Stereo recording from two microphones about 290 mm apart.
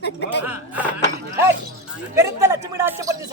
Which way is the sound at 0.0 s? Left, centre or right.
Left.